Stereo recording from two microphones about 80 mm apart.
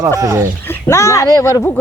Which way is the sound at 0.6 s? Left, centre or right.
Left.